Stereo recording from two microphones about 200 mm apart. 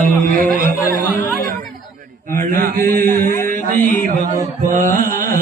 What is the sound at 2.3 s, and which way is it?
Mantra, 45° right (ahead or behind).